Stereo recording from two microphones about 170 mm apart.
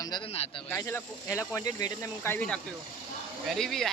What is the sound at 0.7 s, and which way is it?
Speech, 15° left (ahead or behind).